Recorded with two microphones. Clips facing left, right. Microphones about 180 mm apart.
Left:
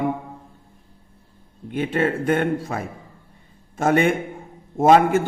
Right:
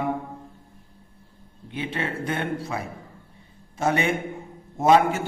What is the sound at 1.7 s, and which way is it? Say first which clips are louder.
A man's voice: left 8 dB; 45° left (ahead or behind).